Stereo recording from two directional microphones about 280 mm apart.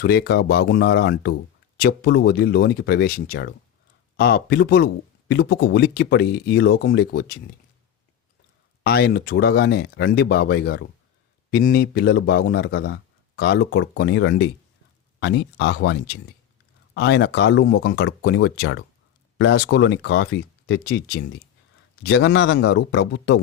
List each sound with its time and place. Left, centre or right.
0.0 s a man's voice: left
8.8 s a man's voice: left